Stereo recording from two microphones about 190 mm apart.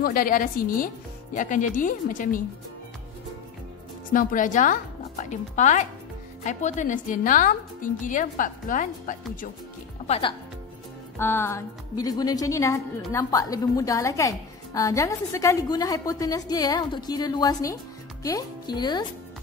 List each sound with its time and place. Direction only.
0.0 s a woman's voice: 50° left (ahead or behind)
4.1 s a woman's voice: 45° left (ahead or behind)
10.0 s speech: 30° left (ahead or behind)
11.1 s a woman's voice: 10° left (ahead or behind)